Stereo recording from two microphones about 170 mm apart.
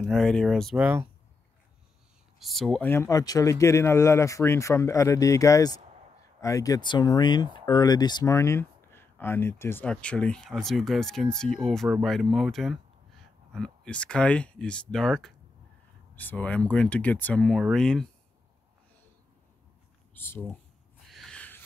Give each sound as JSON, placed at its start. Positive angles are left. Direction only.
{"t": 0.0, "sound": "speech", "side_deg": 5}
{"t": 2.3, "sound": "speech", "side_deg": 0}
{"t": 20.2, "sound": "speech", "side_deg": 15}
{"t": 21.1, "sound": "a sound", "side_deg": 5}